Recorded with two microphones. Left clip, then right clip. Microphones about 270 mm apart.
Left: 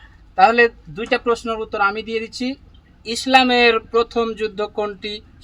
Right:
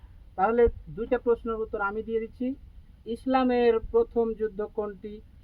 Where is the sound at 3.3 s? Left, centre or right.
Centre.